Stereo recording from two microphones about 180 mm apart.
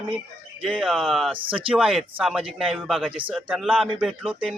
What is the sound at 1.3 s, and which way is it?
Speech, 30° right (ahead or behind).